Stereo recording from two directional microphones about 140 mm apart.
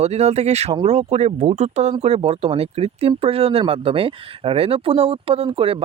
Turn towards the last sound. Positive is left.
turn(degrees=-40)  # may be behind; listen again after turning